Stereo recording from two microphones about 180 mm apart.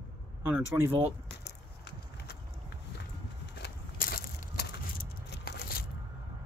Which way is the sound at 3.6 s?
55° left (ahead or behind).